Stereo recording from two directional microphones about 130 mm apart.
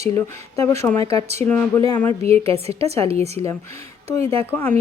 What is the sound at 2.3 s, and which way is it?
A woman's voice, 50° right (ahead or behind).